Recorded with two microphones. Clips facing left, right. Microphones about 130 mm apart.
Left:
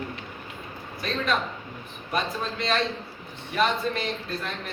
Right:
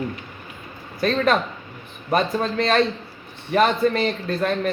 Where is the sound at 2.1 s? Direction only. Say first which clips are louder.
Right 8 dB; 55° right (ahead or behind).